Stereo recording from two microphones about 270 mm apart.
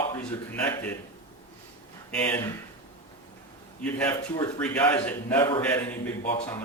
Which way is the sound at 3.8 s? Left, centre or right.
Centre.